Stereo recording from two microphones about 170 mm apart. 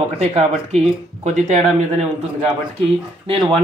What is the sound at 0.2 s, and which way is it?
Speech, 40° right (ahead or behind).